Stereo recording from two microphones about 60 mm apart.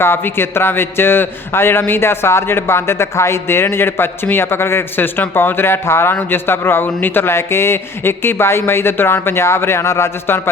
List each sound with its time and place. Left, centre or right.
0.0 s a man's voice: left